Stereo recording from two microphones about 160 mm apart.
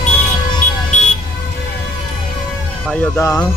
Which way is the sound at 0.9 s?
45° left (ahead or behind).